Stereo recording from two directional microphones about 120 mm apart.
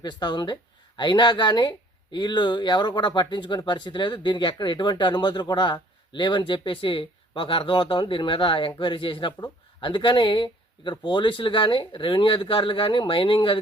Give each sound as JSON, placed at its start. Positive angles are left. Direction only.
{"t": 0.0, "sound": "speech", "side_deg": 40}